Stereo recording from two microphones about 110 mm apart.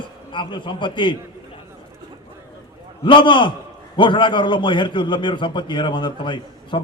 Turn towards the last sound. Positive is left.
turn(degrees=45)  # may be behind; listen again after turning